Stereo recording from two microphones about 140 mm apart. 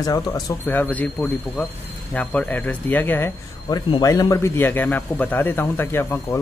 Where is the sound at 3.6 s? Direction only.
30° left (ahead or behind).